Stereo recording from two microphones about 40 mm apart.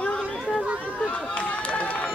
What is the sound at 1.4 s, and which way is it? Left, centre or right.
Run, left.